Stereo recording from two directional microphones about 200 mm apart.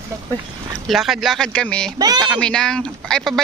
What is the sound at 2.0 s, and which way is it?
Speech, 20° right (ahead or behind).